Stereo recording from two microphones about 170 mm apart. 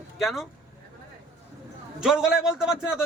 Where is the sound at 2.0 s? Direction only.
5° right (ahead or behind).